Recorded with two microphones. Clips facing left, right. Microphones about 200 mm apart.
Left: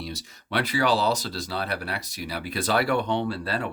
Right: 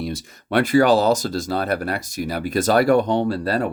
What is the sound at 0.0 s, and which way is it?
Speech, 50° right (ahead or behind).